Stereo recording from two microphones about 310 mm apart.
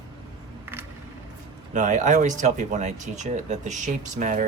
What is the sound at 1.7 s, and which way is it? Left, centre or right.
Speech, right.